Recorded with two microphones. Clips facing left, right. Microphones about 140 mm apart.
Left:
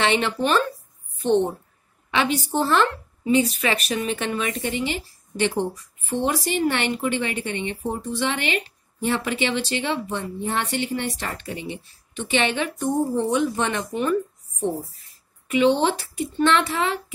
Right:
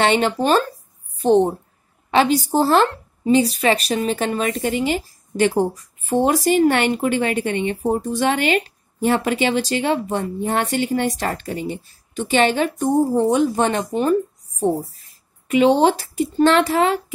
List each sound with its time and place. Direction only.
0.0 s speech: 35° right (ahead or behind)
15.5 s speech: 40° right (ahead or behind)